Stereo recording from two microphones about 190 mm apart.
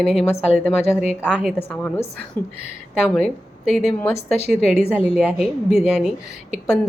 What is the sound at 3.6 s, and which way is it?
Speech, centre (ahead or behind).